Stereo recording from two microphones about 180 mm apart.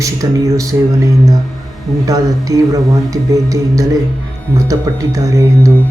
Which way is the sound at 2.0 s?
20° right (ahead or behind).